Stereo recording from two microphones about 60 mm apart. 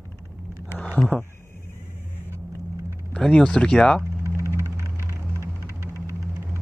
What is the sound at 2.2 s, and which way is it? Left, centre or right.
Vehicle, right.